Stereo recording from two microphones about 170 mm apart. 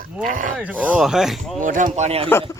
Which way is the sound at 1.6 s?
50° right (ahead or behind).